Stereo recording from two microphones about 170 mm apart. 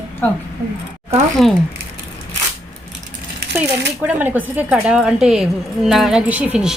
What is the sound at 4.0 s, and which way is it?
A woman's voice, 10° right (ahead or behind).